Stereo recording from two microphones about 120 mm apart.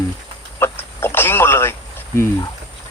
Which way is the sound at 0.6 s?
20° left (ahead or behind).